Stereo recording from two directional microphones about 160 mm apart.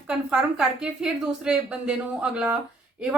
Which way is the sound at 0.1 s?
5° right (ahead or behind).